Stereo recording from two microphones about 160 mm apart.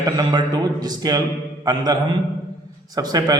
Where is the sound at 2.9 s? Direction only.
25° right (ahead or behind).